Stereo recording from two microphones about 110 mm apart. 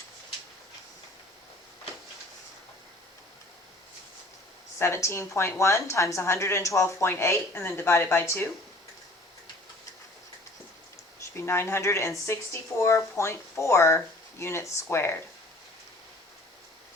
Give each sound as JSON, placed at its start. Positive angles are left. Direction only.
{"t": 4.8, "sound": "speech", "side_deg": 25}
{"t": 11.2, "sound": "speech", "side_deg": 25}